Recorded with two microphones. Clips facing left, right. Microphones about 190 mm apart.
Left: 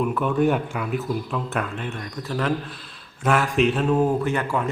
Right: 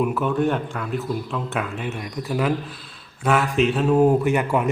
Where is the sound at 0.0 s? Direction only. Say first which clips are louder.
Even; 5° right (ahead or behind).